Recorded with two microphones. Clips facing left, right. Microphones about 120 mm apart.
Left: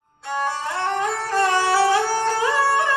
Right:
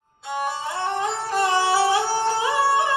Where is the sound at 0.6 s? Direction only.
20° right (ahead or behind).